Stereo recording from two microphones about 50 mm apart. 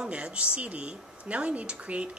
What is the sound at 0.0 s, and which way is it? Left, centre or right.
Speech, right.